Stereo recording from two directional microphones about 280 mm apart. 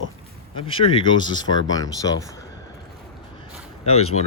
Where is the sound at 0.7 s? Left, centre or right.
Centre.